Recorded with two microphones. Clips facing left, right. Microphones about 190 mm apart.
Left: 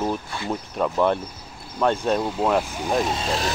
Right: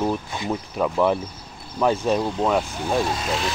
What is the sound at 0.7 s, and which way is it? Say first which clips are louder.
Speech: even; centre (ahead or behind).